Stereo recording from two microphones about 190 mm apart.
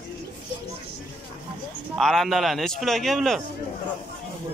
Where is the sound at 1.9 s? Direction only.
Centre (ahead or behind).